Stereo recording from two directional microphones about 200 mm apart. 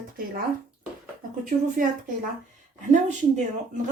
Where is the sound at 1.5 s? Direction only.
40° right (ahead or behind).